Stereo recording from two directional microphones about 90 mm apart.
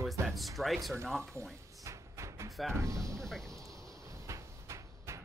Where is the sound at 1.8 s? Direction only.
35° right (ahead or behind).